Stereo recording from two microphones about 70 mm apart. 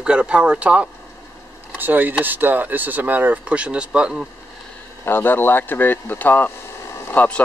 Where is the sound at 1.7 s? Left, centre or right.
Right.